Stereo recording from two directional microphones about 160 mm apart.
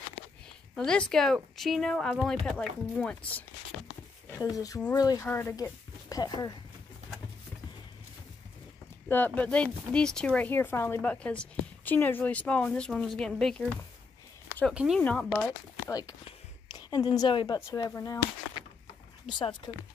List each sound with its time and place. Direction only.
0.7 s speech: 5° left (ahead or behind)
4.4 s speech: 20° left (ahead or behind)
9.1 s speech: 10° left (ahead or behind); by 15.0 s 5° right (ahead or behind)
15.0 s speech: 10° left (ahead or behind)
15.4 s a woman's voice: 20° left (ahead or behind)
17.6 s speech: 20° left (ahead or behind)
19.2 s speech: 30° left (ahead or behind)